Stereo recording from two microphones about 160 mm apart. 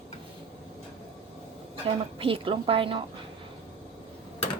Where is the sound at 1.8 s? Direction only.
35° right (ahead or behind).